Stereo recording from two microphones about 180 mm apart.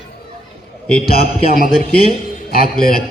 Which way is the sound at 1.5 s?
50° right (ahead or behind).